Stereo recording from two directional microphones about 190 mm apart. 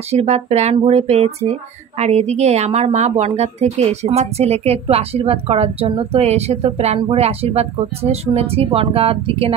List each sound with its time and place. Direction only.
0.1 s speech: 35° right (ahead or behind)